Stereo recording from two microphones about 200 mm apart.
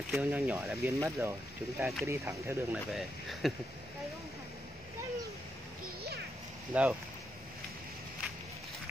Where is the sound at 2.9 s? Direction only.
Centre (ahead or behind).